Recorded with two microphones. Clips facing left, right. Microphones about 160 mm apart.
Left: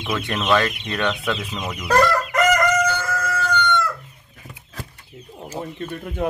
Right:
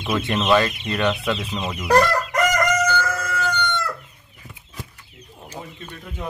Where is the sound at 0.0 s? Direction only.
Centre (ahead or behind).